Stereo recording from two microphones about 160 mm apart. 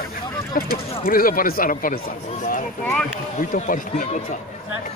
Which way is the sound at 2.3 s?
55° left (ahead or behind).